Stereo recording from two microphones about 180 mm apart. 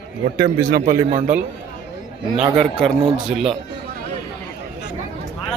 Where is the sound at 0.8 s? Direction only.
45° right (ahead or behind).